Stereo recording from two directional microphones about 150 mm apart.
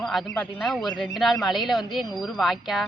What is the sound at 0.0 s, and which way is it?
Speech, centre (ahead or behind).